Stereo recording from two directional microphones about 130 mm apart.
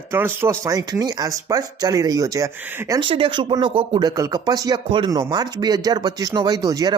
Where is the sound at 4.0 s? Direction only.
30° right (ahead or behind).